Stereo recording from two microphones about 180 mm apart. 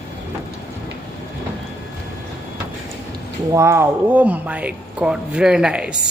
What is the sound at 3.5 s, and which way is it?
Speech, 15° right (ahead or behind).